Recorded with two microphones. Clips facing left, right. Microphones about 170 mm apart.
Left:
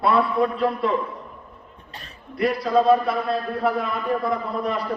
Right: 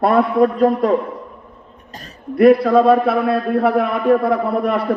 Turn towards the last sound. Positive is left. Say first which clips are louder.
# right 8 dB
turn(degrees=-60)  # may be behind; listen again after turning